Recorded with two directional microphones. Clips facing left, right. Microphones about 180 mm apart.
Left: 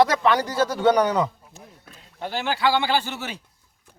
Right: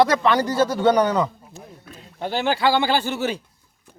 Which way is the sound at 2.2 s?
25° right (ahead or behind).